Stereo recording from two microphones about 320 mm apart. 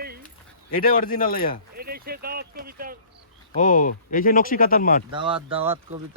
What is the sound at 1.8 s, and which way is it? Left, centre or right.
Speech, right.